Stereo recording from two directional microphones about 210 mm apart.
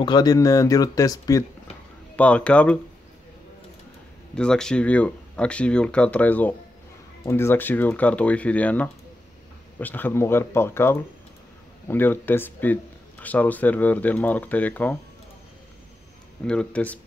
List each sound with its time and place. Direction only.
0.0 s speech: 20° left (ahead or behind)
2.1 s speech: 5° left (ahead or behind)
4.4 s speech: 5° left (ahead or behind)
16.4 s speech: 5° left (ahead or behind)